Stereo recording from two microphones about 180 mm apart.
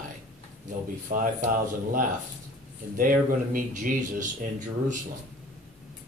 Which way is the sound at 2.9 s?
50° right (ahead or behind).